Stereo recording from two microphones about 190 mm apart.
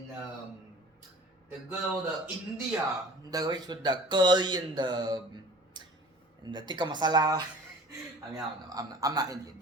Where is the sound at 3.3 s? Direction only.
20° right (ahead or behind).